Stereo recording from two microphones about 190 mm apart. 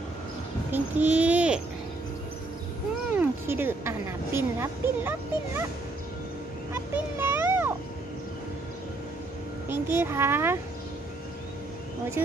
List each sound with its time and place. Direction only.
0.7 s a woman's voice: 10° right (ahead or behind)
3.2 s a woman's voice: 10° right (ahead or behind)
6.7 s a child's voice: 10° right (ahead or behind)
9.7 s a woman's voice: 10° right (ahead or behind)